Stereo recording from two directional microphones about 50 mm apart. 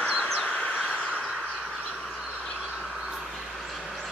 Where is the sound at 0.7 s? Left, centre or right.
Centre.